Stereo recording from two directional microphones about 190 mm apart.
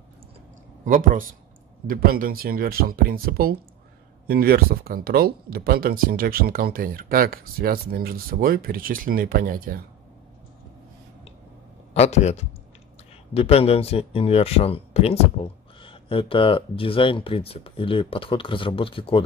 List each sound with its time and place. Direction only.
0.8 s speech: 45° right (ahead or behind)
11.9 s speech: 35° left (ahead or behind)